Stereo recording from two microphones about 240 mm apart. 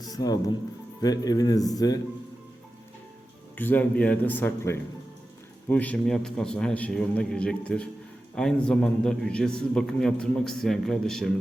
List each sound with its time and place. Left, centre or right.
0.0 s speech: centre
3.6 s a man's voice: centre